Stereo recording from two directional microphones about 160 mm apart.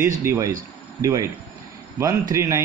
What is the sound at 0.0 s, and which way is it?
Speech, 15° right (ahead or behind).